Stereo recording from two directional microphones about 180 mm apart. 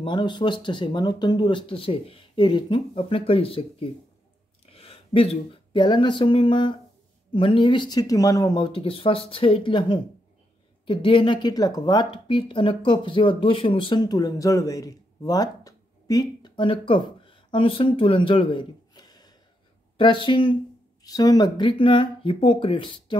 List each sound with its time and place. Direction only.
0.0 s speech: 25° left (ahead or behind)